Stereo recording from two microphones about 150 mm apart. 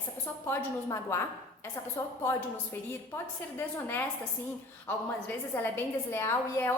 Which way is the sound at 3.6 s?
15° left (ahead or behind).